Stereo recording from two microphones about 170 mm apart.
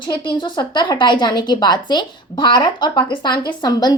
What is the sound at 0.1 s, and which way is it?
A child's voice, 30° left (ahead or behind).